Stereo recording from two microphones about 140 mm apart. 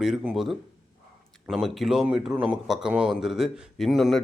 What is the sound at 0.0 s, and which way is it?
Speech, 5° right (ahead or behind).